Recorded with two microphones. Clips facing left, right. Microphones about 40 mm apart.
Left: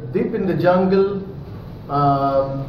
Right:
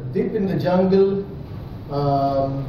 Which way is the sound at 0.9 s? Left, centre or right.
Left.